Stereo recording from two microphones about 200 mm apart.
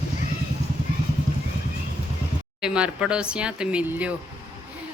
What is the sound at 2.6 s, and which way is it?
Speech, 5° right (ahead or behind).